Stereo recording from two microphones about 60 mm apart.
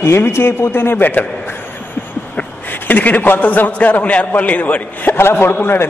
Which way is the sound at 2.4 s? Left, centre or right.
Left.